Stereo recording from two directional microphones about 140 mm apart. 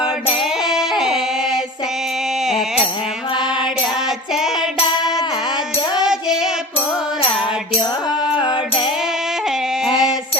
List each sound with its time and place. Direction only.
0.0 s child singing: 35° left (ahead or behind)
0.6 s child singing: 5° right (ahead or behind)
4.4 s music: 5° right (ahead or behind)
8.4 s music: 35° left (ahead or behind)
9.8 s a sound: 5° right (ahead or behind)